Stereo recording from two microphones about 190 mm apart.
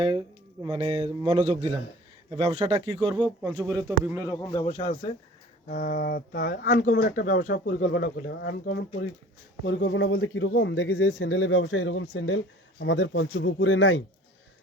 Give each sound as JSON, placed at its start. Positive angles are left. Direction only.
{"t": 0.0, "sound": "speech", "side_deg": -25}
{"t": 3.2, "sound": "speech", "side_deg": 5}
{"t": 3.7, "sound": "speech", "side_deg": -15}
{"t": 4.3, "sound": "speech", "side_deg": 20}
{"t": 4.6, "sound": "speech", "side_deg": 30}
{"t": 5.6, "sound": "speech", "side_deg": 45}
{"t": 7.5, "sound": "speech", "side_deg": 65}
{"t": 7.8, "sound": "speech", "side_deg": 45}
{"t": 9.6, "sound": "speech", "side_deg": 75}
{"t": 12.8, "sound": "speech", "side_deg": 75}